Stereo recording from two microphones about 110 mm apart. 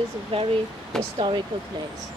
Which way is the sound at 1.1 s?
50° right (ahead or behind).